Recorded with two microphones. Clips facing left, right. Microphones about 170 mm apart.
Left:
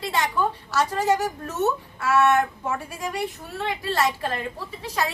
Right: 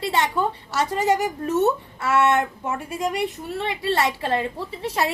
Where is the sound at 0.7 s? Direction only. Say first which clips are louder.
Right 1 dB; 20° right (ahead or behind).